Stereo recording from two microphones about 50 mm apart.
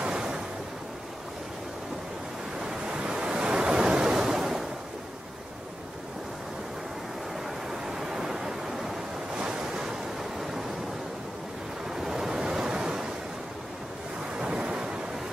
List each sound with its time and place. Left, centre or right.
0.0 s waves: centre
2.6 s waves: centre
7.8 s a sound: centre
9.4 s waves: centre
11.9 s waves: centre
14.3 s waves: centre